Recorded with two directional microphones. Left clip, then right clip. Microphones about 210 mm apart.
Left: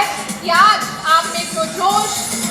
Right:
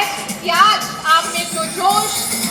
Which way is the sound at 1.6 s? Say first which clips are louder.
Even; 40° right (ahead or behind).